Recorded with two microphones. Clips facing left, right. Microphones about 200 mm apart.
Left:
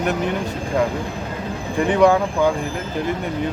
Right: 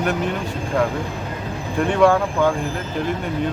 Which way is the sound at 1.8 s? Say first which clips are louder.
Left 1 dB; 15° left (ahead or behind).